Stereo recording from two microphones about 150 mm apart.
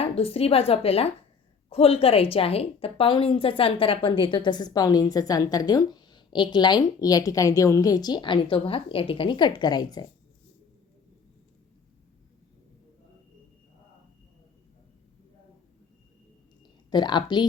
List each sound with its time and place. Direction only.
0.0 s a woman's voice: 40° left (ahead or behind)
16.9 s a woman's voice: 30° left (ahead or behind)